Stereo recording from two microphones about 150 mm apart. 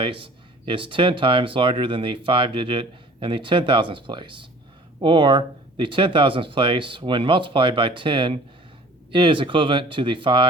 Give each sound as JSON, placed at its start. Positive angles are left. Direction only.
{"t": 0.0, "sound": "speech", "side_deg": -35}